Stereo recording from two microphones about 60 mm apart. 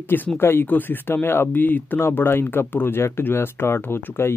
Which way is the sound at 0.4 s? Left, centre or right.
Left.